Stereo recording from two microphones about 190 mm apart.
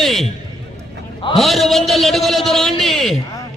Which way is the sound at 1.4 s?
Centre (ahead or behind).